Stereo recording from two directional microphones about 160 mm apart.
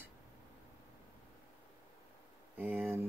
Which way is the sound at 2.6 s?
10° right (ahead or behind).